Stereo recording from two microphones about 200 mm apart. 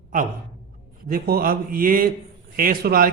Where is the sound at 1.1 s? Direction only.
45° right (ahead or behind).